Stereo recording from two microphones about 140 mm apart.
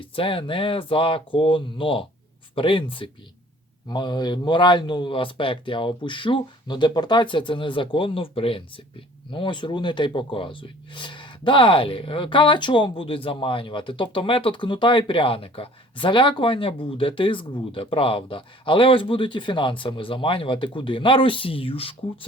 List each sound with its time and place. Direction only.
0.0 s speech: 40° left (ahead or behind)